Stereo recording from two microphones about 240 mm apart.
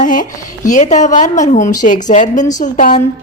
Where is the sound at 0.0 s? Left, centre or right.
Left.